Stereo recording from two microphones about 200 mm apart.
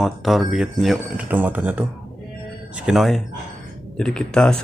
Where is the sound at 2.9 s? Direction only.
Centre (ahead or behind).